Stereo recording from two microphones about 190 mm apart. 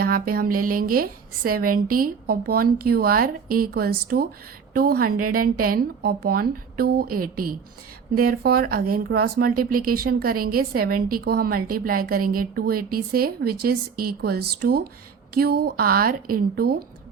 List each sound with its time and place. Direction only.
0.0 s a woman's voice: 50° right (ahead or behind)